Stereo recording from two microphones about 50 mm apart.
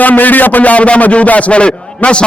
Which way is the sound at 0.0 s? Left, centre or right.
Left.